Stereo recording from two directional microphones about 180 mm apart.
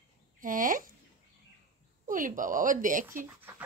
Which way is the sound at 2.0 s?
45° right (ahead or behind).